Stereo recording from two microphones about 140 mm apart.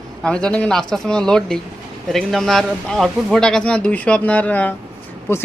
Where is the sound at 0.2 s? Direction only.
5° left (ahead or behind).